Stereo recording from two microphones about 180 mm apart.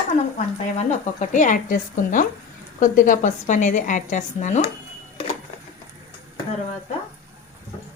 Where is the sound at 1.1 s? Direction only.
45° left (ahead or behind).